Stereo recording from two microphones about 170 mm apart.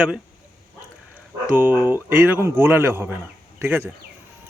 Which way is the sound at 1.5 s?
10° right (ahead or behind).